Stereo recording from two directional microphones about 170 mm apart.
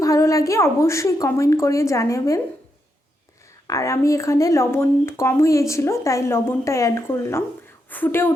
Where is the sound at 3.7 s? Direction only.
15° left (ahead or behind).